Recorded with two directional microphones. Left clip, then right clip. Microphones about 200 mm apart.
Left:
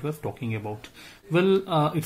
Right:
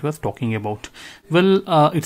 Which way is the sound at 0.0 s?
40° right (ahead or behind).